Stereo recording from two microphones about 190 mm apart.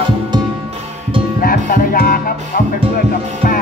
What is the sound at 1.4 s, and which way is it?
Music, 45° left (ahead or behind).